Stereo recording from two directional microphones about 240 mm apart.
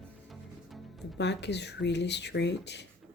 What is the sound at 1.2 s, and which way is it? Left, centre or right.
Speech, left.